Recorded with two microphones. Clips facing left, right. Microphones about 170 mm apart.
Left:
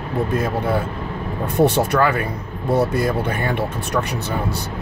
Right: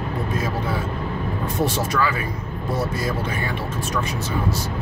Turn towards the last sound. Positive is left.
turn(degrees=60)  # may be behind; listen again after turning